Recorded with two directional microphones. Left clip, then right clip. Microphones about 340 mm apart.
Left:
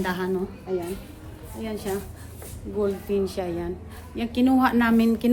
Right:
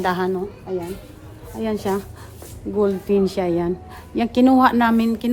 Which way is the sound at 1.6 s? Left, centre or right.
Right.